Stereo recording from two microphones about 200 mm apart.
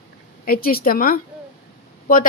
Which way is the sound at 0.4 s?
45° left (ahead or behind).